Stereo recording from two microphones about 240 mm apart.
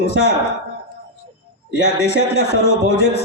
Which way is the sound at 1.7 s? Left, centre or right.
Left.